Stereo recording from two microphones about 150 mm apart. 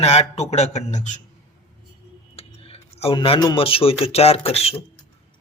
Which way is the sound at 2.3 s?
40° left (ahead or behind).